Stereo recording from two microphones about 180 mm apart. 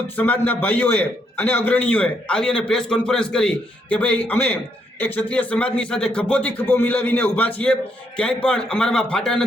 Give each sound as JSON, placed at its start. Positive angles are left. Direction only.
{"t": 0.2, "sound": "speech", "side_deg": 10}